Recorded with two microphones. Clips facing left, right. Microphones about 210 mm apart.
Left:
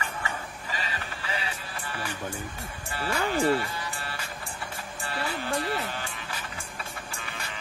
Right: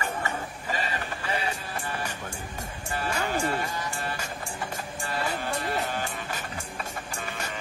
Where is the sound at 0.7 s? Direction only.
45° right (ahead or behind).